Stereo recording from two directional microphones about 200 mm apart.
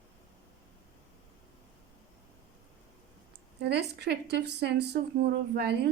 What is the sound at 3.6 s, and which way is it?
A woman's voice, 55° right (ahead or behind).